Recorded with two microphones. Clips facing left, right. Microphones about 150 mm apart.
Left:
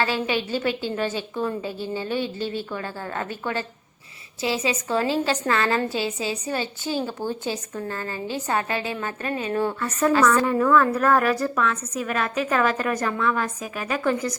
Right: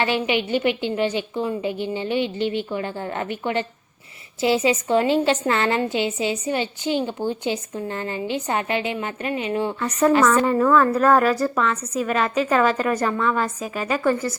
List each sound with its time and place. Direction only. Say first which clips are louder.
0.0 s a woman's voice: right 2 dB; 20° right (ahead or behind)
10.5 s a woman's voice: right 2 dB; 10° right (ahead or behind)